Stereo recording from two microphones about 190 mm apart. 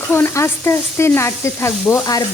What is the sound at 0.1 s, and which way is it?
Speech, 10° left (ahead or behind).